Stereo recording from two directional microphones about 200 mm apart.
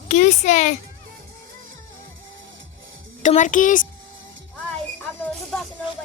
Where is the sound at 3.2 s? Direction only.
40° left (ahead or behind).